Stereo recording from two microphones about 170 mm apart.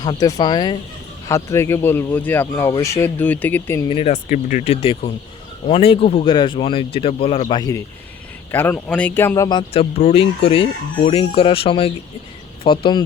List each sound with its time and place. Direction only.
0.0 s speech: 25° left (ahead or behind)
3.8 s speech: 35° left (ahead or behind)
8.5 s speech: 10° left (ahead or behind); by 13.1 s 25° left (ahead or behind)